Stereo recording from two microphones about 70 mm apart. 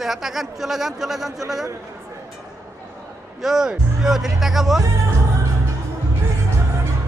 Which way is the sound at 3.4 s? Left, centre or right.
Centre.